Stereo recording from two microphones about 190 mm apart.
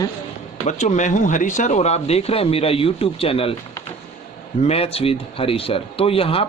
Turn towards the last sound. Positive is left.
turn(degrees=30)  # may be behind; listen again after turning